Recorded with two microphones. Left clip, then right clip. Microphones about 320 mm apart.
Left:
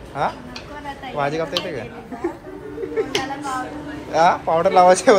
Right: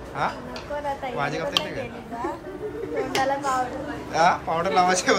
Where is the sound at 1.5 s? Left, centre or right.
Right.